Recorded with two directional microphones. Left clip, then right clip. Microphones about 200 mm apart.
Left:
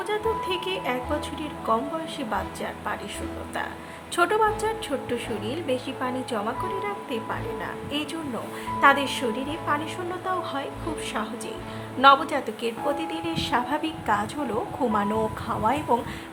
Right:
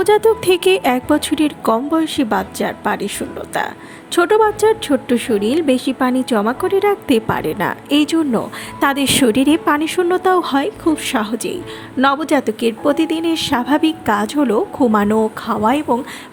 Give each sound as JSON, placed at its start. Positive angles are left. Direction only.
{"t": 0.0, "sound": "a woman's voice", "side_deg": -40}